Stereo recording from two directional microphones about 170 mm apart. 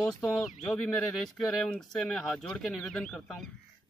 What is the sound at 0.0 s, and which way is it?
Speech, centre (ahead or behind).